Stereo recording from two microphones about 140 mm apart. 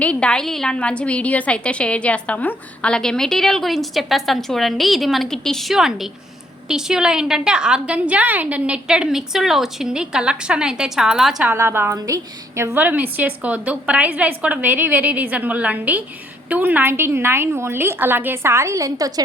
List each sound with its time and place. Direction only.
0.0 s a woman's voice: 10° left (ahead or behind)
11.5 s a woman's voice: 20° right (ahead or behind)